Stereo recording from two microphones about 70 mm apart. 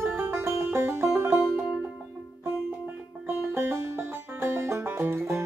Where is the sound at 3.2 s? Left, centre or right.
Right.